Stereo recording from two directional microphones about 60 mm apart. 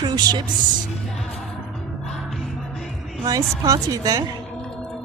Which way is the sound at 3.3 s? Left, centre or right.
Right.